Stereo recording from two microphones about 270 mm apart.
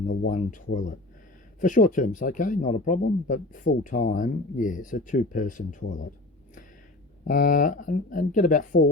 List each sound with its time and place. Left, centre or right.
0.1 s speech: left
7.3 s speech: left